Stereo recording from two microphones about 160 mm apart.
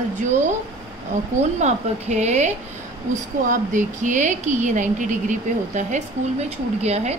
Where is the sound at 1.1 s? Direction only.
50° right (ahead or behind).